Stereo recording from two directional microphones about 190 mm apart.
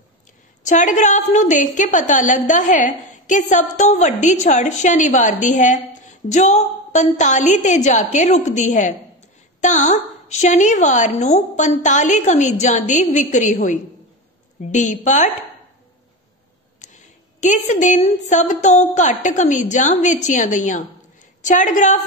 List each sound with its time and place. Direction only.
0.7 s a woman's voice: 40° left (ahead or behind)
16.8 s a sound: 40° left (ahead or behind)
17.4 s a woman's voice: 40° left (ahead or behind)